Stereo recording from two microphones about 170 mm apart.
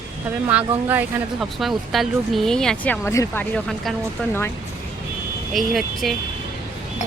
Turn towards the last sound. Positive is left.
turn(degrees=0)  # may be behind; listen again after turning